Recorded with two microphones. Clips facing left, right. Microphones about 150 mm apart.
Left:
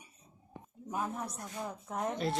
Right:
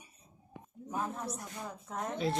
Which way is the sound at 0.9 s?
15° left (ahead or behind).